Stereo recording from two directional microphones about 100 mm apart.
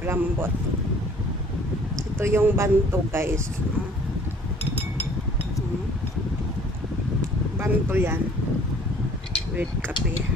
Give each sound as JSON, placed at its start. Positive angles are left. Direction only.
{"t": 0.0, "sound": "speech", "side_deg": -25}
{"t": 2.1, "sound": "speech", "side_deg": -25}
{"t": 7.5, "sound": "speech", "side_deg": -25}